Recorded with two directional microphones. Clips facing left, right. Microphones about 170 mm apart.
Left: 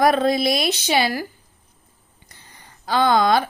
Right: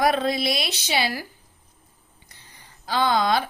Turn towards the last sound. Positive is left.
turn(degrees=50)  # may be behind; listen again after turning